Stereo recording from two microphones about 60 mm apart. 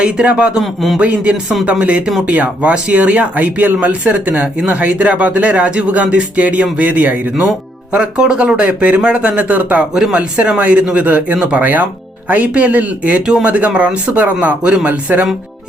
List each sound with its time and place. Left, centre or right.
0.0 s speech: centre
0.6 s speech: centre
0.9 s speech: right
7.9 s speech: centre
9.9 s speech: centre